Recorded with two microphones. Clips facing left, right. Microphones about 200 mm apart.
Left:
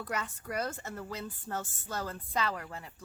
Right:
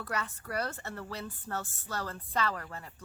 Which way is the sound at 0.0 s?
10° left (ahead or behind).